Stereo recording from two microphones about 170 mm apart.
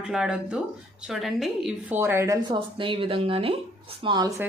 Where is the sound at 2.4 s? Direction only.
30° right (ahead or behind).